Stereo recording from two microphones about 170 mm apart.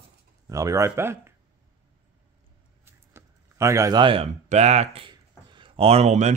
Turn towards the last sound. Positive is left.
turn(degrees=-40)  # may be behind; listen again after turning